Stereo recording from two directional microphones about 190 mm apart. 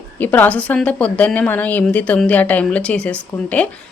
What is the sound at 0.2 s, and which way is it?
A woman's voice, 10° left (ahead or behind).